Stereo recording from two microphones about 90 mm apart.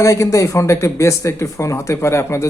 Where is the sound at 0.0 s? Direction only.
35° left (ahead or behind).